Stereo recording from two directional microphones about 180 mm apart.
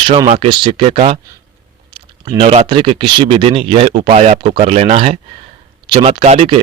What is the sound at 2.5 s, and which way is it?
Speech, 35° right (ahead or behind).